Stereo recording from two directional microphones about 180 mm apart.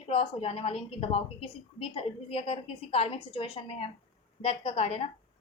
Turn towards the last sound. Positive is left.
turn(degrees=30)  # may be behind; listen again after turning